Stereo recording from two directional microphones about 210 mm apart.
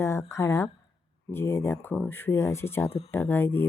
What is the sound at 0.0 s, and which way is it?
A woman's voice, 15° left (ahead or behind).